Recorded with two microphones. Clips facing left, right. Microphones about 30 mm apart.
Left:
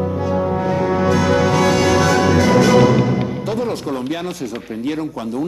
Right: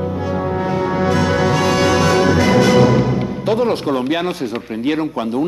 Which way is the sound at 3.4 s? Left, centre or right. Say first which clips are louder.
Right 5 dB; right.